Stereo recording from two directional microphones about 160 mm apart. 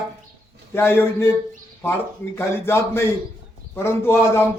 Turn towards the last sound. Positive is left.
turn(degrees=15)  # may be behind; listen again after turning